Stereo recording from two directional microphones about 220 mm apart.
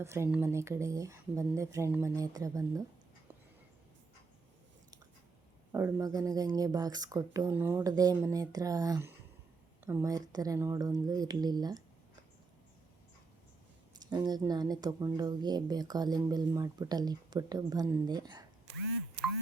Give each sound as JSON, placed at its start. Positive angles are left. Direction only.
{"t": 0.0, "sound": "a woman's voice", "side_deg": -10}
{"t": 5.7, "sound": "a woman's voice", "side_deg": -15}
{"t": 14.0, "sound": "a woman's voice", "side_deg": -20}